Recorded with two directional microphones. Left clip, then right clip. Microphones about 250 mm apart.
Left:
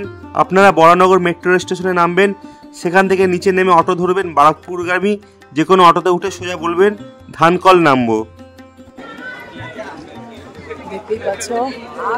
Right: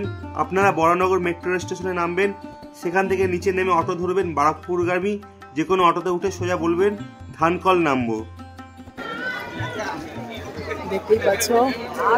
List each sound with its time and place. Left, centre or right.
0.3 s a man's voice: left
11.3 s speech: centre